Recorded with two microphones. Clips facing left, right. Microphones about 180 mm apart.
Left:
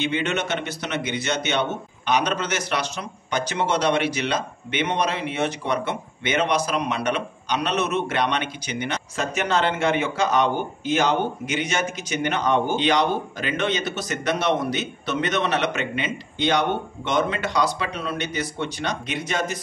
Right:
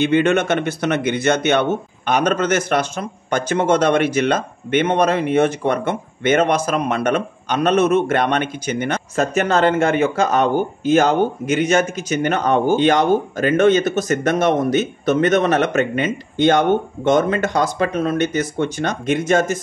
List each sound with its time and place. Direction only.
0.0 s a man's voice: 50° right (ahead or behind)